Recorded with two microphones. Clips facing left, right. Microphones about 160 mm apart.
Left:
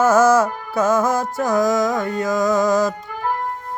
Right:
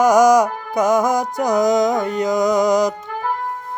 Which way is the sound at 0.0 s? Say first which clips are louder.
Right 2 dB; 15° right (ahead or behind).